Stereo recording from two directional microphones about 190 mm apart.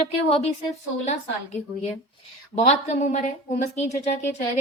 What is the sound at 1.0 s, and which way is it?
A woman's voice, 35° left (ahead or behind).